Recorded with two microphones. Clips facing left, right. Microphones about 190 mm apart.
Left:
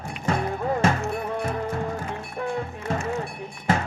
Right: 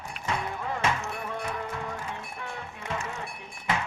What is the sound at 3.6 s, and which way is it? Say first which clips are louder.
Music: left 6 dB; 45° left (ahead or behind).